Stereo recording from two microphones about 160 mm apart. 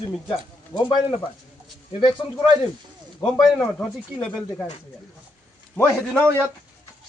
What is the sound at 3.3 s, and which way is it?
A man's voice, 5° left (ahead or behind).